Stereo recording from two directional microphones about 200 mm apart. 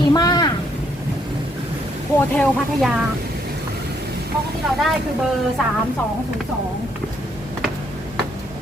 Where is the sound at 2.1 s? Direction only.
5° left (ahead or behind).